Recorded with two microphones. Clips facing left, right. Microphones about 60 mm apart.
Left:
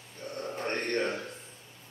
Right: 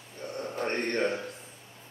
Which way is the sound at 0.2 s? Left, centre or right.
Right.